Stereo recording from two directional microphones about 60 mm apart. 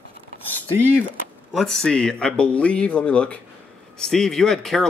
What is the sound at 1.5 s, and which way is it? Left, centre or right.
Speech, centre.